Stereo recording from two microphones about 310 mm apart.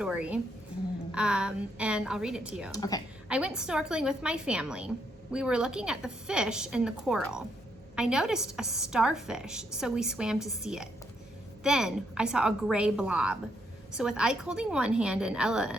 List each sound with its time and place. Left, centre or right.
0.0 s a woman's voice: centre
2.7 s a woman's voice: centre
3.2 s a woman's voice: centre